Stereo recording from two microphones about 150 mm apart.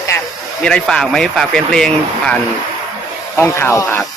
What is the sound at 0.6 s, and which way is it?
Speech, 5° left (ahead or behind).